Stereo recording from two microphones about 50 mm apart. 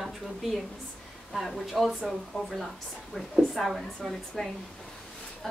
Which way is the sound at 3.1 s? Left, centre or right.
Centre.